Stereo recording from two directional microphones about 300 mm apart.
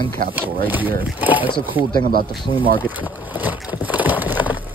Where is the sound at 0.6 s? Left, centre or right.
Centre.